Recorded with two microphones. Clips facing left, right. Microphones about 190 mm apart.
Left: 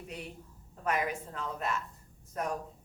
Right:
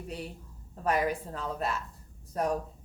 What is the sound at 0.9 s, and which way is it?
A woman's voice, 35° right (ahead or behind).